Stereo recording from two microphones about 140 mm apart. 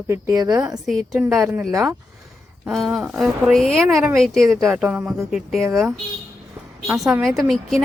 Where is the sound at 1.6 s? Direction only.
20° right (ahead or behind).